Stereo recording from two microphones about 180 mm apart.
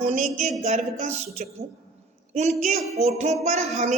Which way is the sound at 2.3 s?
40° right (ahead or behind).